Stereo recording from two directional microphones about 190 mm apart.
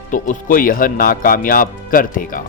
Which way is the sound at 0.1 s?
45° left (ahead or behind).